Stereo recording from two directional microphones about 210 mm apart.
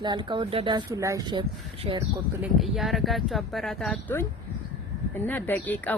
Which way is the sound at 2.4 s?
Centre (ahead or behind).